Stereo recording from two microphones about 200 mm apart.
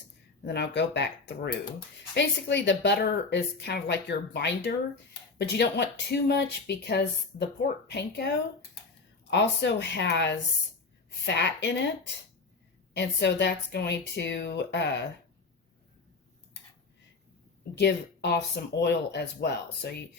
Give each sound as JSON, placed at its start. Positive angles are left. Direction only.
{"t": 0.4, "sound": "a woman's voice", "side_deg": 55}
{"t": 9.3, "sound": "a woman's voice", "side_deg": 60}
{"t": 12.9, "sound": "a woman's voice", "side_deg": 60}
{"t": 17.7, "sound": "a woman's voice", "side_deg": 55}